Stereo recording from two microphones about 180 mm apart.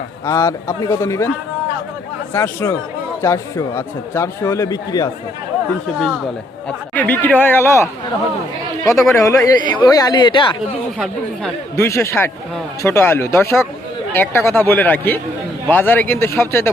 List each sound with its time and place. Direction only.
0.3 s speech: 15° left (ahead or behind)
2.3 s speech: 10° left (ahead or behind)
6.7 s speech: 10° left (ahead or behind); by 10.6 s 25° left (ahead or behind)
10.9 s speech: centre (ahead or behind)
11.8 s speech: 15° left (ahead or behind)